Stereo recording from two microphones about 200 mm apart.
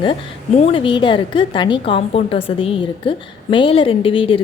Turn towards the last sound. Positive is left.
turn(degrees=25)  # may be behind; listen again after turning